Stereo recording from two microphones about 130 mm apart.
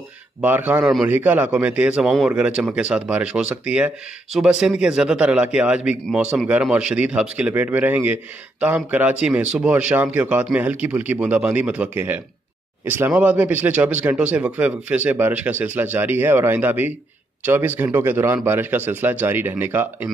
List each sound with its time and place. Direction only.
0.4 s speech: 15° right (ahead or behind)